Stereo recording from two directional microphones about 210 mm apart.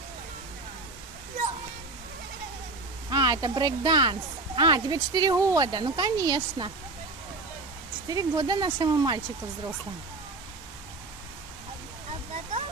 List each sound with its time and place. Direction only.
3.1 s speech: 20° right (ahead or behind)
8.1 s speech: 20° right (ahead or behind)